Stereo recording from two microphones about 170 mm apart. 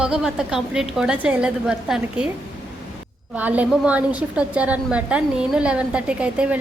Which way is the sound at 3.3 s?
10° right (ahead or behind).